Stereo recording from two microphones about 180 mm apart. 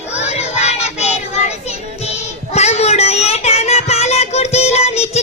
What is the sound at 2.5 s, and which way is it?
Child singing, 35° left (ahead or behind).